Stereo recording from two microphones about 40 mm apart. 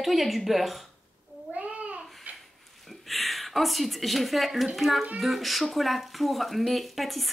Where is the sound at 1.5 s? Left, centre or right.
Right.